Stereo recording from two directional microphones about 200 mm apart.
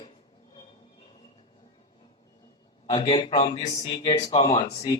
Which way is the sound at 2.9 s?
25° left (ahead or behind).